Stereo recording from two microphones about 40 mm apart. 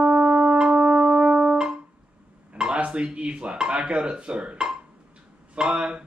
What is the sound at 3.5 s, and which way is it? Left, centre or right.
Speech, centre.